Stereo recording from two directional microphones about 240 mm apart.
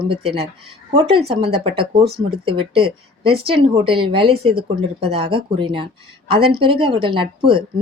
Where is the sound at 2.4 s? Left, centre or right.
Right.